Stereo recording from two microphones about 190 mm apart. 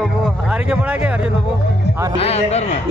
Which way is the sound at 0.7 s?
5° right (ahead or behind).